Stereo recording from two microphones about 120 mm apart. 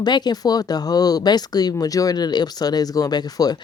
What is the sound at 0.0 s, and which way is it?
Speech, 35° left (ahead or behind).